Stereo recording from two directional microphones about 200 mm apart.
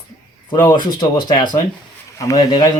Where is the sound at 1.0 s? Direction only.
25° left (ahead or behind).